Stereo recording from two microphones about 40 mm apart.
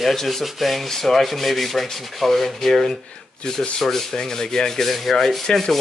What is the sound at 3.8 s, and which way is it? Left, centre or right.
Sanding, centre.